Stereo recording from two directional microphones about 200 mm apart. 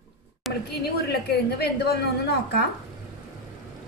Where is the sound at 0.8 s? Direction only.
55° left (ahead or behind).